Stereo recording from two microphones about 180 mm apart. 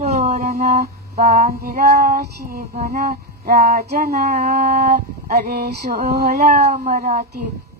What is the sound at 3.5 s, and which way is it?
Cat, 60° right (ahead or behind).